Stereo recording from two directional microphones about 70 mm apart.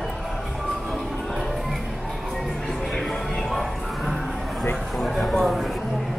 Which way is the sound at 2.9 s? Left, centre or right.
Centre.